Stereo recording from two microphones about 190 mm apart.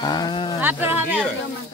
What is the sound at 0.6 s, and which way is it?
Speech, 10° right (ahead or behind).